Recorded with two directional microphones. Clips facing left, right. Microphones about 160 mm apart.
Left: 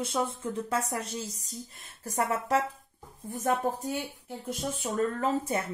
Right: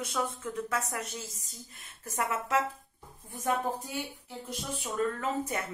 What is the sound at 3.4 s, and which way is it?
Speech, 45° left (ahead or behind).